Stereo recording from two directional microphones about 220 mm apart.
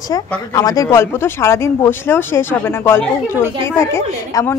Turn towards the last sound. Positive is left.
turn(degrees=15)  # may be behind; listen again after turning